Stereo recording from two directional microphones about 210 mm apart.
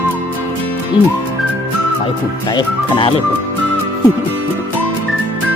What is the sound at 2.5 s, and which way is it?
Speech, 20° left (ahead or behind).